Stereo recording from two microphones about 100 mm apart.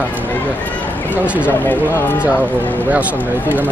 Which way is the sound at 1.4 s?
20° left (ahead or behind).